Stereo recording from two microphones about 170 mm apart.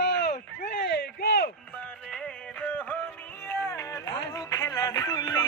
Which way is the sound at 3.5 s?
20° left (ahead or behind).